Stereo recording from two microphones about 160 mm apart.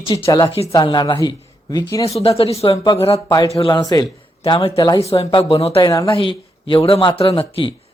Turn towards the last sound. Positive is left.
turn(degrees=30)  # may be behind; listen again after turning